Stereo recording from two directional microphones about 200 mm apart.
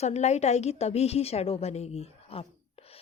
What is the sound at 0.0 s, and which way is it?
A woman's voice, 35° left (ahead or behind).